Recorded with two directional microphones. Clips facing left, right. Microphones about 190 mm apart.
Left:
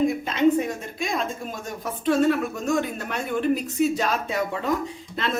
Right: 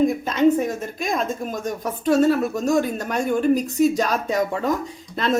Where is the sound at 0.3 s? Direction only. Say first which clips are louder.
Right 2 dB; 45° right (ahead or behind).